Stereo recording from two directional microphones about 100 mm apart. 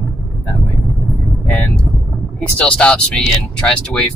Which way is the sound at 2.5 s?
10° left (ahead or behind).